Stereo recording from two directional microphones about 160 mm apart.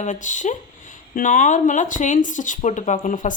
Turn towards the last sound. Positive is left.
turn(degrees=55)  # may be behind; listen again after turning